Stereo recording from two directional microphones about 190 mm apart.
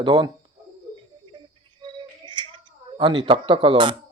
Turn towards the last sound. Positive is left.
turn(degrees=-25)  # may be behind; listen again after turning